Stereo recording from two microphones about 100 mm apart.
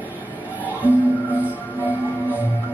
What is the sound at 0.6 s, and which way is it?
Music, 15° right (ahead or behind).